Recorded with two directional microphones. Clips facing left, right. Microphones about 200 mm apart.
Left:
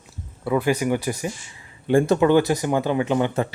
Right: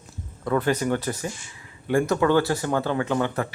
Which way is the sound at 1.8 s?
25° left (ahead or behind).